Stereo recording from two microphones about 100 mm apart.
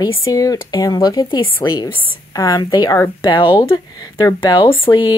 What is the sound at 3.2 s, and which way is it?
Speech, 55° left (ahead or behind).